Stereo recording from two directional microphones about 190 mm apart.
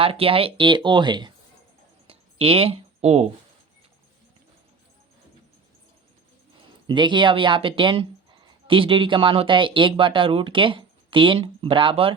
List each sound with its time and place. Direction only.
0.0 s speech: 30° right (ahead or behind)
2.0 s a sound: 30° right (ahead or behind)
6.8 s speech: 25° right (ahead or behind)